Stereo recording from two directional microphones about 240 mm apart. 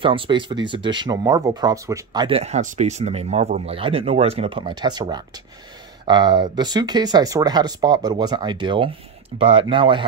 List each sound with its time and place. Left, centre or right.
0.0 s speech: right